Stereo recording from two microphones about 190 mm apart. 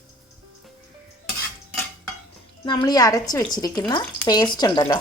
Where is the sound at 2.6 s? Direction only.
20° left (ahead or behind).